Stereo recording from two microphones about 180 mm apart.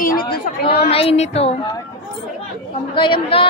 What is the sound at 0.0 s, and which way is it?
Chatter, 55° left (ahead or behind).